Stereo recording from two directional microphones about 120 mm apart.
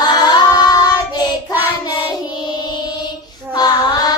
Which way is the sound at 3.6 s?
35° left (ahead or behind).